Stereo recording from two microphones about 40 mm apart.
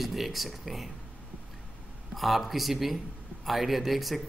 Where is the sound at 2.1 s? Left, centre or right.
Centre.